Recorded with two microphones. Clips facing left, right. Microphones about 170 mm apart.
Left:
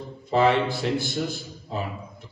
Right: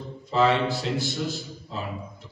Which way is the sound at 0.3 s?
55° left (ahead or behind).